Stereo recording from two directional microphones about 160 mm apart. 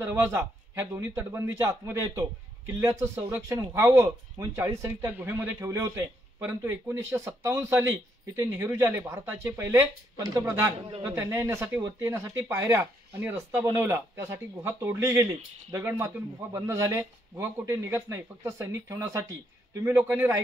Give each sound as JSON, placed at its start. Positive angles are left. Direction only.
{"t": 0.0, "sound": "a man's voice", "side_deg": -15}